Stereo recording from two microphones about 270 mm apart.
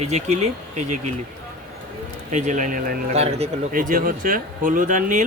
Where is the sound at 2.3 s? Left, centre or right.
Right.